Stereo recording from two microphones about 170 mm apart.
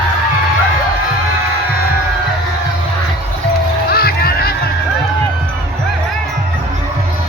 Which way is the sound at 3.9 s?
65° left (ahead or behind).